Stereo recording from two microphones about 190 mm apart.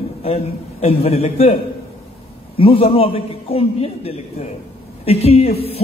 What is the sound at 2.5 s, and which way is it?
A man's voice, 30° left (ahead or behind).